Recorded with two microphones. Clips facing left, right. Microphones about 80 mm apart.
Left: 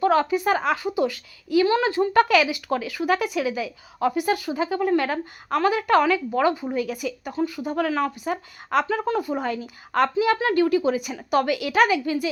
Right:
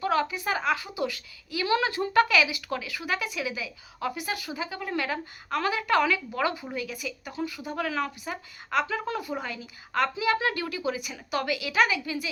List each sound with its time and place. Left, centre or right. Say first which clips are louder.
0.0 s speech: left 7 dB; left
2.3 s speech: left 5 dB; left
6.7 s a woman's voice: left 8 dB; left